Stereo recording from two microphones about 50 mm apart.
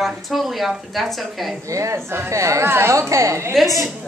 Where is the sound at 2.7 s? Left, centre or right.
Right.